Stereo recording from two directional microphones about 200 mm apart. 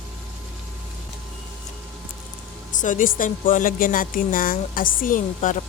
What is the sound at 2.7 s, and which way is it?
Speech, 40° left (ahead or behind).